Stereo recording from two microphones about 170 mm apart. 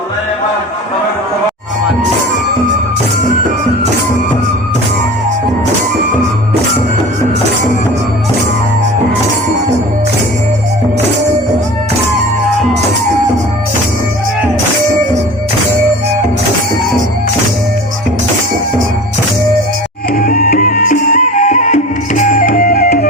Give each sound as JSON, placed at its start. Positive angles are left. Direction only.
{"t": 20.1, "sound": "music", "side_deg": 55}